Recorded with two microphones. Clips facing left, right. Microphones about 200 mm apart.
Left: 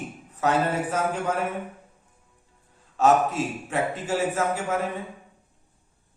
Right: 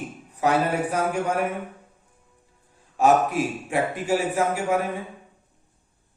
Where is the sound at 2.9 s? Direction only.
10° right (ahead or behind).